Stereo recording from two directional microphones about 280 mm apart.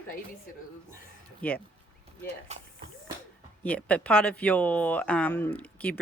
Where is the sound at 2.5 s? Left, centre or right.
Right.